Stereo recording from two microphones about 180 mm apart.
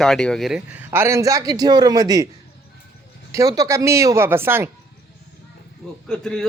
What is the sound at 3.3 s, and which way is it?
Speech, 20° right (ahead or behind).